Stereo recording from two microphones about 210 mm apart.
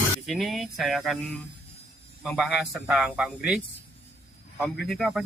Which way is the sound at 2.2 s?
5° right (ahead or behind).